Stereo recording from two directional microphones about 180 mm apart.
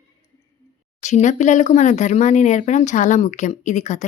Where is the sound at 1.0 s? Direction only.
40° left (ahead or behind).